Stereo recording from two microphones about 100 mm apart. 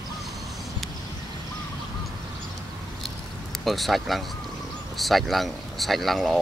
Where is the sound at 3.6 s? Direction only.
Centre (ahead or behind).